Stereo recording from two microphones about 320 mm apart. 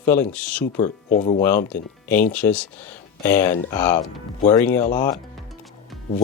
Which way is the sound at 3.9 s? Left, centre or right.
Left.